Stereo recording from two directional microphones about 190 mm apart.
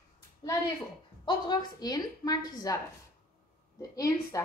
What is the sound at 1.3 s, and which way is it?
A woman's voice, 20° left (ahead or behind).